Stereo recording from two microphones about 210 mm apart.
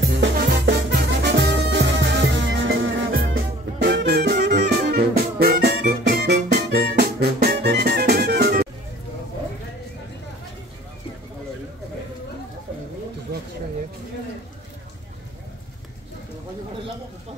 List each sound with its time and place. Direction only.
0.0 s music: 60° right (ahead or behind)
3.8 s music: 55° right (ahead or behind)